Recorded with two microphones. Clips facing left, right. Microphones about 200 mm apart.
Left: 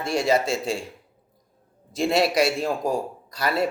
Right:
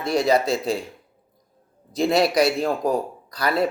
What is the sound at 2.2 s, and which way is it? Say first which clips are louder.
Speech: right 2 dB; centre (ahead or behind).